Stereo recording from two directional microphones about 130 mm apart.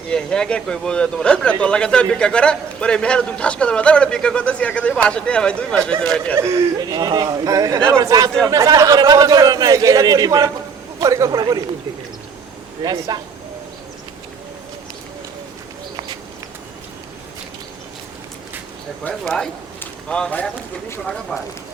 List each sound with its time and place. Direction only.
0.1 s a man's voice: 5° left (ahead or behind)
6.4 s a man's voice: 25° right (ahead or behind)
12.8 s speech: 30° right (ahead or behind)
19.0 s speech: 5° left (ahead or behind)